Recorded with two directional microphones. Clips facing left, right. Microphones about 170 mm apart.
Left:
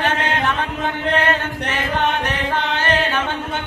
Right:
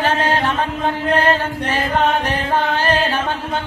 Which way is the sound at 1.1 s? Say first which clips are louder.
Right 3 dB; 35° right (ahead or behind).